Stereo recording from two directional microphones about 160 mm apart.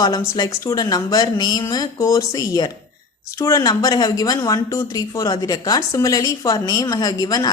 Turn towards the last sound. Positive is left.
turn(degrees=25)  # may be behind; listen again after turning